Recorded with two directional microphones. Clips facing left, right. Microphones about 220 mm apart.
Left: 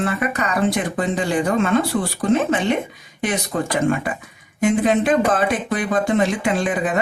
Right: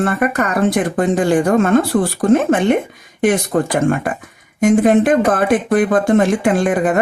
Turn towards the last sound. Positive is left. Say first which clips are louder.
# right 6 dB
turn(degrees=-50)  # may be behind; listen again after turning